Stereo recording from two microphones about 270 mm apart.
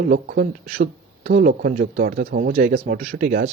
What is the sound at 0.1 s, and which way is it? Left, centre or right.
Speech, right.